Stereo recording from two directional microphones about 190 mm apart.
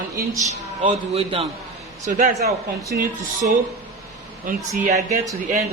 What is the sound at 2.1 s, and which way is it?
Speech, 40° right (ahead or behind).